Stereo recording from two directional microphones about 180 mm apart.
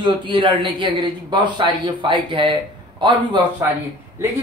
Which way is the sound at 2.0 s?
25° right (ahead or behind).